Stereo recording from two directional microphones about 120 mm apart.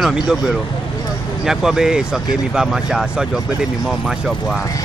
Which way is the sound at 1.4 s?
5° right (ahead or behind).